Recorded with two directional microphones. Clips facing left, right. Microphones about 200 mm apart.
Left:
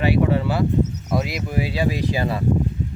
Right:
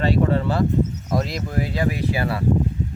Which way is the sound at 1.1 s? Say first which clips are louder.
Even; 5° left (ahead or behind).